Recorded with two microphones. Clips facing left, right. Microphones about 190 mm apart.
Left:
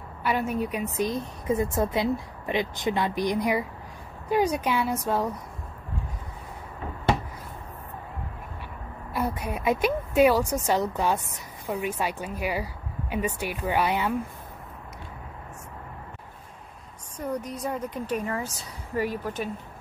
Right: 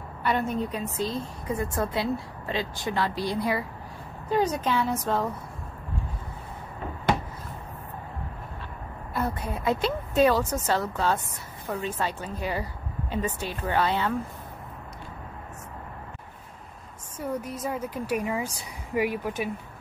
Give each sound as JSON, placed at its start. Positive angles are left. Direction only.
{"t": 0.2, "sound": "speech", "side_deg": 5}
{"t": 9.1, "sound": "speech", "side_deg": 10}
{"t": 17.2, "sound": "a woman's voice", "side_deg": -5}